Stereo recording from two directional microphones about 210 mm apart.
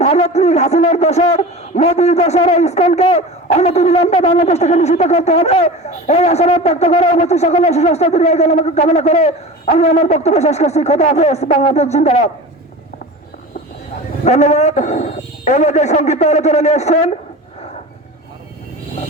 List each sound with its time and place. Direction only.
0.0 s a man's voice: 30° left (ahead or behind)
14.3 s a man's voice: 35° left (ahead or behind)